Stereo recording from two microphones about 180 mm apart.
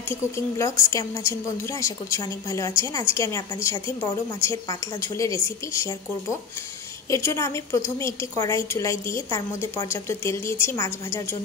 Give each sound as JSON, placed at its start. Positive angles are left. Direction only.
{"t": 0.1, "sound": "a woman's voice", "side_deg": 15}
{"t": 7.1, "sound": "a woman's voice", "side_deg": 15}